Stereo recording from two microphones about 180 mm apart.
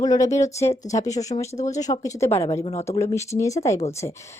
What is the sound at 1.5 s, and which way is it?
Speech, 40° left (ahead or behind).